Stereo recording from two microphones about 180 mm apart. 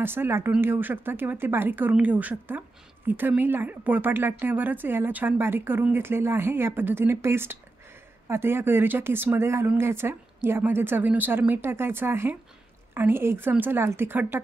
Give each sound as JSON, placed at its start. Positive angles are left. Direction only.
{"t": 0.0, "sound": "speech", "side_deg": -10}